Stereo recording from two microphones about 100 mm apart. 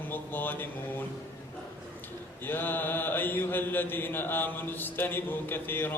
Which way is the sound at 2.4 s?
20° left (ahead or behind).